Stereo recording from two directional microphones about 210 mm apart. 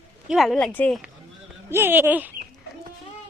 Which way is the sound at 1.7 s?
10° right (ahead or behind).